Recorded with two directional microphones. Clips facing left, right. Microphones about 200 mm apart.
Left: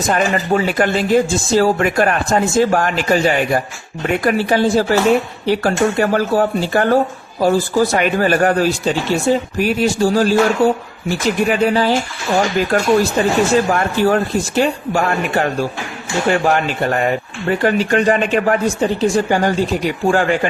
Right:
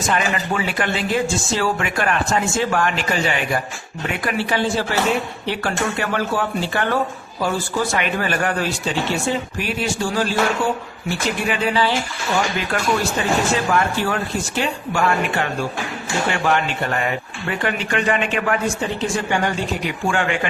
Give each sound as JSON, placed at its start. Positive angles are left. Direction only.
{"t": 0.1, "sound": "speech", "side_deg": 40}